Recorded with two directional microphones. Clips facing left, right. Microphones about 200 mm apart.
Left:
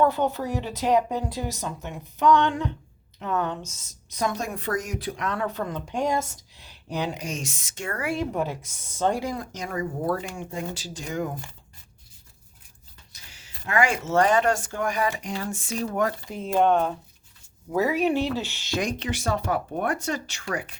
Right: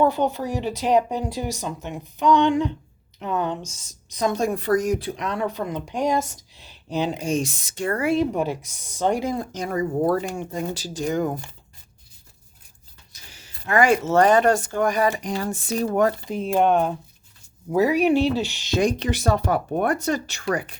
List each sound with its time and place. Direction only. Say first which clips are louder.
0.0 s speech: right 2 dB; 15° right (ahead or behind)
3.6 s speech: right 2 dB; 20° left (ahead or behind)
4.1 s speech: right 4 dB; 20° right (ahead or behind)
4.4 s speech: right 8 dB; 35° right (ahead or behind)
13.3 s speech: right 4 dB; 40° right (ahead or behind)
16.2 s speech: right 2 dB; 20° right (ahead or behind)
18.8 s speech: right 7 dB; 35° right (ahead or behind)